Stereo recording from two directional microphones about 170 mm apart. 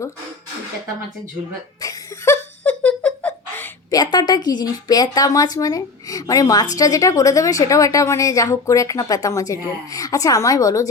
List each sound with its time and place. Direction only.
1.8 s laughter: 20° left (ahead or behind)
3.9 s a woman's voice: 25° left (ahead or behind)